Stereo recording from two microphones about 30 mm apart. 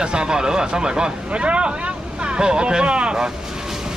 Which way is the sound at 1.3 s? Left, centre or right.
Right.